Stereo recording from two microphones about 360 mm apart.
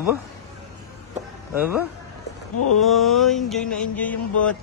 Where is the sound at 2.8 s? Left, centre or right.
Centre.